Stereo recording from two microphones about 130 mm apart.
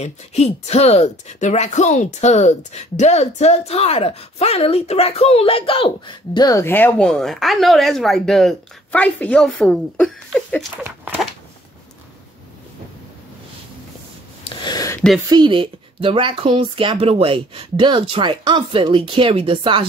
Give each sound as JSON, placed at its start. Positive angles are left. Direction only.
{"t": 0.0, "sound": "speech", "side_deg": 55}
{"t": 6.6, "sound": "speech", "side_deg": 15}
{"t": 14.4, "sound": "a sound", "side_deg": 35}
{"t": 15.2, "sound": "speech", "side_deg": -35}